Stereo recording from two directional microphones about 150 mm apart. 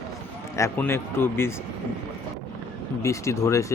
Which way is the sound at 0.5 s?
15° left (ahead or behind).